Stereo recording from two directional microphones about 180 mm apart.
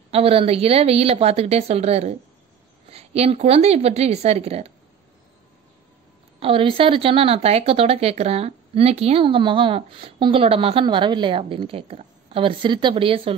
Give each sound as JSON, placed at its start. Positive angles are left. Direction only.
{"t": 0.1, "sound": "a woman's voice", "side_deg": -30}
{"t": 6.4, "sound": "a woman's voice", "side_deg": -30}